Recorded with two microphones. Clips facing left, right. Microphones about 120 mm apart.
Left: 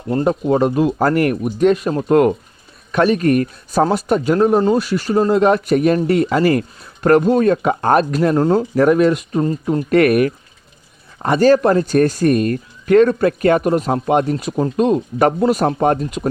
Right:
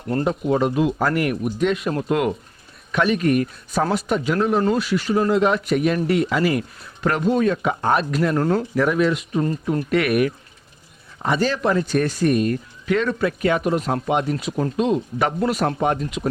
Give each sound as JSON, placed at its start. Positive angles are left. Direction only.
{"t": 0.3, "sound": "speech", "side_deg": 40}
{"t": 8.4, "sound": "speech", "side_deg": 25}
{"t": 8.8, "sound": "speech", "side_deg": 45}
{"t": 9.4, "sound": "speech", "side_deg": 25}
{"t": 9.9, "sound": "speech", "side_deg": 45}